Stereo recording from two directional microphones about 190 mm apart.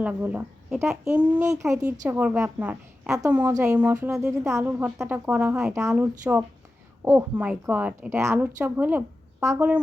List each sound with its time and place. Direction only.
0.0 s a woman's voice: 10° right (ahead or behind)